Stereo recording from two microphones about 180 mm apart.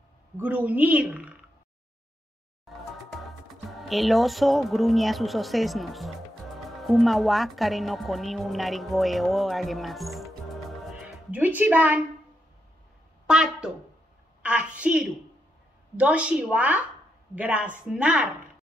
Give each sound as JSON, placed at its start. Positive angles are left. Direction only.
{"t": 0.4, "sound": "a woman's voice", "side_deg": -10}
{"t": 3.8, "sound": "a woman's voice", "side_deg": 0}
{"t": 13.3, "sound": "a woman's voice", "side_deg": -5}